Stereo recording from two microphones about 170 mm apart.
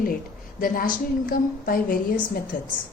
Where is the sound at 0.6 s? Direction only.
55° left (ahead or behind).